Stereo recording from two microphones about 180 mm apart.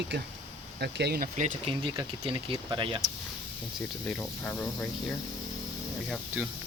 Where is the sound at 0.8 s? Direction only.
65° right (ahead or behind); by 1.7 s 45° right (ahead or behind).